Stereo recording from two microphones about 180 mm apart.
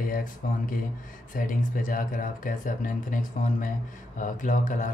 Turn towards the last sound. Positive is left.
turn(degrees=45)  # may be behind; listen again after turning